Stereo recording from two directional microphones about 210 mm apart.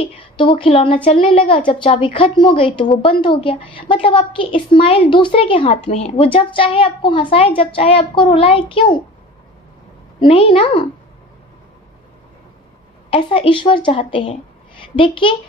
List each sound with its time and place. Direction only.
0.0 s a woman's voice: 25° left (ahead or behind)
10.2 s speech: 25° left (ahead or behind)
13.1 s speech: 25° left (ahead or behind)